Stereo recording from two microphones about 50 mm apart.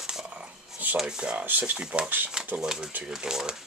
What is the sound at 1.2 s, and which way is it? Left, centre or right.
Speech, centre.